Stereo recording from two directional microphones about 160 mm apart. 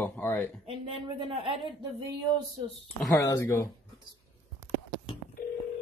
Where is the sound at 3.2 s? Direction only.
20° left (ahead or behind).